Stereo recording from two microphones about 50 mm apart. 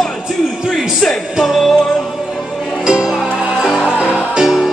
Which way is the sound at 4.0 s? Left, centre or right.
Left.